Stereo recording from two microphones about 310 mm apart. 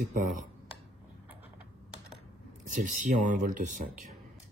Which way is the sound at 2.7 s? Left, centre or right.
Right.